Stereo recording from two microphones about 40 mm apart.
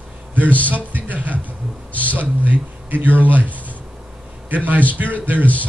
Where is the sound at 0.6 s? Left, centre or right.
Right.